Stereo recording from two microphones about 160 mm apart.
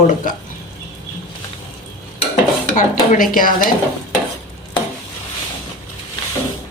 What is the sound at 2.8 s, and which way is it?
Speech, 55° left (ahead or behind).